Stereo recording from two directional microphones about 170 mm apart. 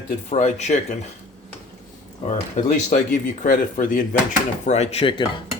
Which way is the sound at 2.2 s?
45° left (ahead or behind).